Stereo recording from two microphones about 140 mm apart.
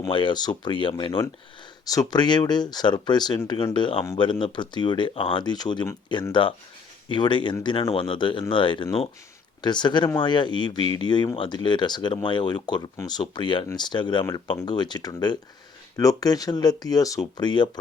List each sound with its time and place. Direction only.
0.1 s speech: 35° left (ahead or behind)